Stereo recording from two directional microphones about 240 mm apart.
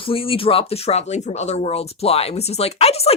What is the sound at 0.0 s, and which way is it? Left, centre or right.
Speech, left.